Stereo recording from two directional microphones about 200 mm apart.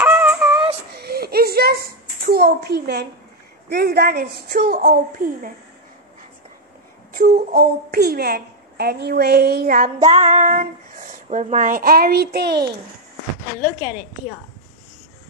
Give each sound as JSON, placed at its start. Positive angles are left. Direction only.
{"t": 0.0, "sound": "synthetic singing", "side_deg": -5}
{"t": 0.9, "sound": "a sound", "side_deg": -50}
{"t": 3.7, "sound": "a woman's voice", "side_deg": -50}
{"t": 7.2, "sound": "a woman's voice", "side_deg": -50}